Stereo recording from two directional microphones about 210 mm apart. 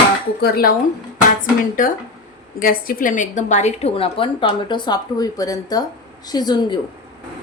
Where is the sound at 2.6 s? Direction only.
45° left (ahead or behind); by 6.7 s 20° left (ahead or behind).